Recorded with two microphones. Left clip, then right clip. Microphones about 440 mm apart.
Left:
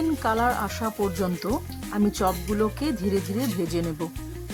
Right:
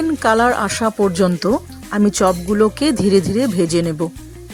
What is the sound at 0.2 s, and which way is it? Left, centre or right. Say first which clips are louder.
Speech: right 13 dB; left.